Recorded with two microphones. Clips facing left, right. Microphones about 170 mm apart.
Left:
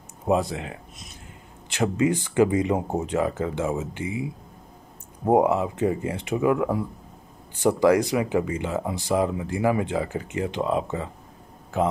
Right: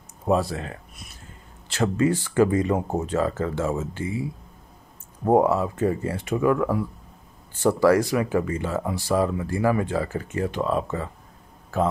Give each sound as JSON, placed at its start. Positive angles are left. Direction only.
{"t": 0.3, "sound": "speech", "side_deg": 20}